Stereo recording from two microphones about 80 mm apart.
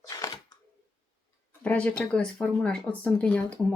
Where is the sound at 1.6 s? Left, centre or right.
Centre.